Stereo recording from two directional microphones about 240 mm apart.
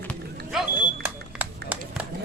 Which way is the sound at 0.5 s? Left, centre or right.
Centre.